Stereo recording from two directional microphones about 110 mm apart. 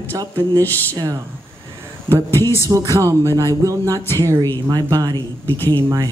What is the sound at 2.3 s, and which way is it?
Speech, 25° left (ahead or behind).